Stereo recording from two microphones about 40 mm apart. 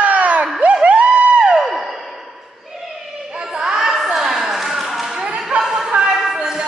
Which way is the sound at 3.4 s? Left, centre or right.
Centre.